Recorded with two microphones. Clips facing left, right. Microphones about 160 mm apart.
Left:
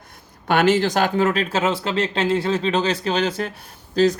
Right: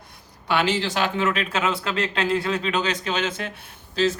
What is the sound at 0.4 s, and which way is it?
A man's voice, 50° left (ahead or behind).